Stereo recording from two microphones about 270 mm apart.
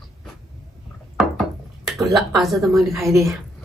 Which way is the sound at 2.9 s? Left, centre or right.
Centre.